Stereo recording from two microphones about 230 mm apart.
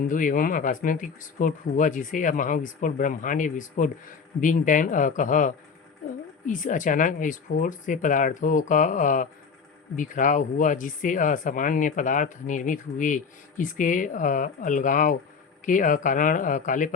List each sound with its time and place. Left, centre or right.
0.0 s speech: left